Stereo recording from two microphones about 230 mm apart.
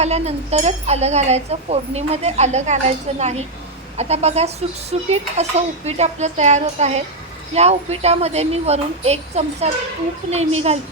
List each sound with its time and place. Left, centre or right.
0.0 s speech: right